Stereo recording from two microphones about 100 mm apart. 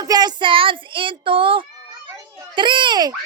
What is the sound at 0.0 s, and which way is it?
A child's voice, 40° right (ahead or behind).